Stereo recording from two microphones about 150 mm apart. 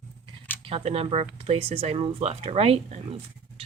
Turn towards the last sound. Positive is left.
turn(degrees=-45)  # may be behind; listen again after turning